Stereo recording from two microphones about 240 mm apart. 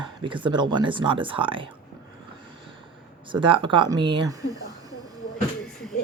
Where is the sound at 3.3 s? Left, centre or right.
Right.